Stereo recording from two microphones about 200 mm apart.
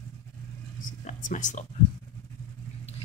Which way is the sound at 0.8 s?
40° left (ahead or behind).